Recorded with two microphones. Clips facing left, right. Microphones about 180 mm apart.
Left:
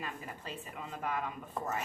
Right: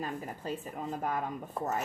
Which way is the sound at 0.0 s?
40° right (ahead or behind).